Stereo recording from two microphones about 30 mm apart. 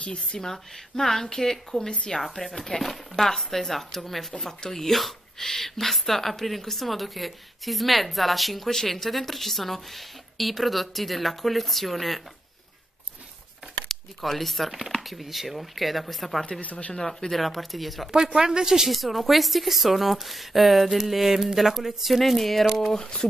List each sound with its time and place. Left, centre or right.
0.0 s speech: left
0.4 s speech: centre
4.6 s speech: centre
4.9 s speech: centre
13.8 s speech: centre
16.6 s speech: left
17.1 s speech: centre
18.1 s speech: right
18.9 s speech: centre